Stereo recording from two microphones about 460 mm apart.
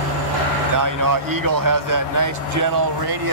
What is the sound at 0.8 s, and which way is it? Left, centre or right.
Speech, right.